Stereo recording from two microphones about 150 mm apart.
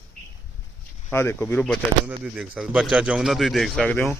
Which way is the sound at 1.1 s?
15° left (ahead or behind).